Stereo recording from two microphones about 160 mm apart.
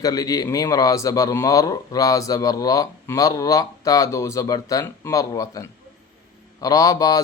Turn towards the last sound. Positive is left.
turn(degrees=20)  # may be behind; listen again after turning